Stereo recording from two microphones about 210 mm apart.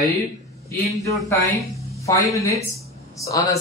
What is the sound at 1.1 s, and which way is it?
Speech, 15° left (ahead or behind).